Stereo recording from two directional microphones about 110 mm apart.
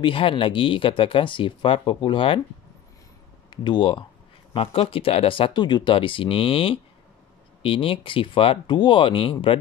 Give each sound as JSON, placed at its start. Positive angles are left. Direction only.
{"t": 0.0, "sound": "speech", "side_deg": 55}
{"t": 3.4, "sound": "speech", "side_deg": 45}